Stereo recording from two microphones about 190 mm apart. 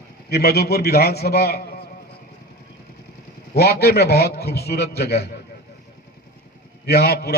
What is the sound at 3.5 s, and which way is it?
A man's voice, 55° left (ahead or behind).